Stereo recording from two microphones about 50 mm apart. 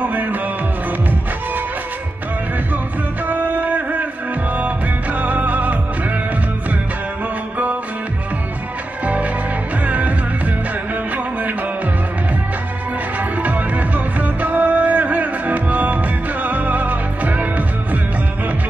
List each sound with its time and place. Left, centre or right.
0.0 s music: right
3.3 s music: right
5.2 s music: right
9.0 s music: right
13.4 s music: right